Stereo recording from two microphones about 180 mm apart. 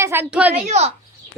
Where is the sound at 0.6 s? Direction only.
35° right (ahead or behind).